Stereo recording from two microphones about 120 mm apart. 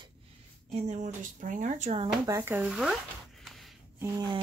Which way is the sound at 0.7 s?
75° right (ahead or behind).